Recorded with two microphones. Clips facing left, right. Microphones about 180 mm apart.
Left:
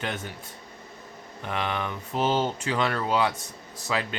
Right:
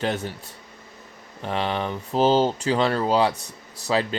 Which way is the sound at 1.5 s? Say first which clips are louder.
Right 4 dB; 30° right (ahead or behind).